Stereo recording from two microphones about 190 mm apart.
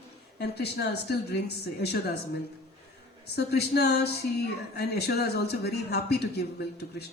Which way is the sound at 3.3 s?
60° left (ahead or behind).